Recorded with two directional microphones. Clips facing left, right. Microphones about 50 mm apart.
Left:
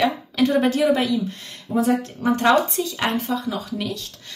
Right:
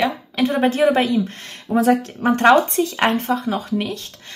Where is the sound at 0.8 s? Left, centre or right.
Right.